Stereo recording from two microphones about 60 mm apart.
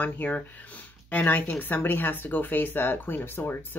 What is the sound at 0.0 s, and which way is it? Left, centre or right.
Speech, left.